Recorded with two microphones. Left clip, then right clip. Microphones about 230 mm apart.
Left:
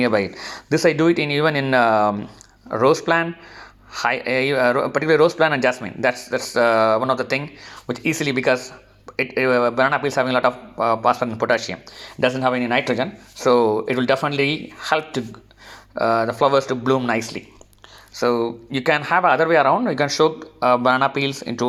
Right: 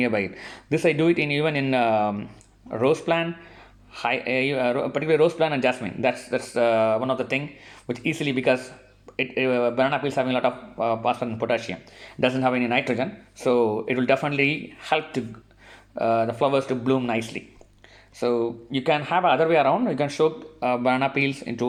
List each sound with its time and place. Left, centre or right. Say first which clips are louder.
0.0 s a man's voice: left 5 dB; centre